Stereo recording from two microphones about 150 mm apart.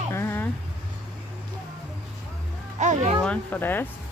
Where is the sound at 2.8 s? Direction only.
50° right (ahead or behind).